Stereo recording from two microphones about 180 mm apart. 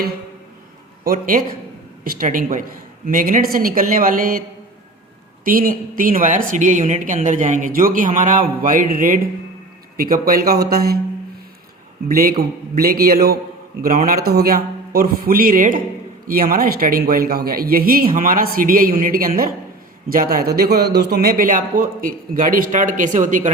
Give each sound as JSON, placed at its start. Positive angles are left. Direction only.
{"t": 1.0, "sound": "speech", "side_deg": -50}
{"t": 5.5, "sound": "a man's voice", "side_deg": -50}
{"t": 12.0, "sound": "a man's voice", "side_deg": -55}